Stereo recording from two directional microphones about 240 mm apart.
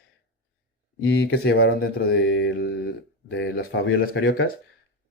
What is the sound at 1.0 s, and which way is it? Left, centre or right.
Speech, left.